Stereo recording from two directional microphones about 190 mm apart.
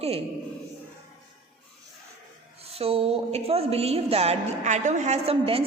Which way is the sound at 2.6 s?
30° right (ahead or behind).